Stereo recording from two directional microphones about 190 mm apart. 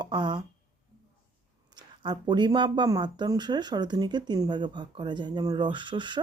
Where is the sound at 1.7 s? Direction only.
25° right (ahead or behind).